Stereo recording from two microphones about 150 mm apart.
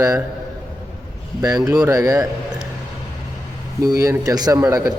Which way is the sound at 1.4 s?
25° right (ahead or behind).